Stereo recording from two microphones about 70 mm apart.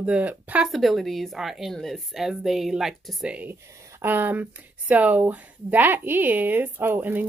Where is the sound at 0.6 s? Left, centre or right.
Centre.